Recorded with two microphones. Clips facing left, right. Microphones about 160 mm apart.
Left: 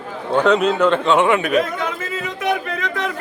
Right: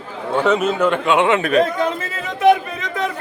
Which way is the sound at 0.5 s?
15° right (ahead or behind).